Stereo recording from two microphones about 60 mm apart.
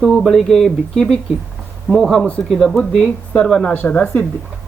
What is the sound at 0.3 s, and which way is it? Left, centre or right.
Speech, centre.